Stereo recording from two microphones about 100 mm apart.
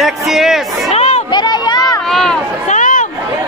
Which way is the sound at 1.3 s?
45° left (ahead or behind).